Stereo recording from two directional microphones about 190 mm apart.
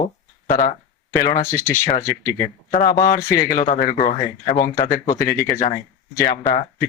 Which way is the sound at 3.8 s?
50° left (ahead or behind).